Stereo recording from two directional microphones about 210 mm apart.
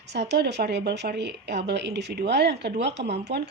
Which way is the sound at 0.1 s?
55° right (ahead or behind).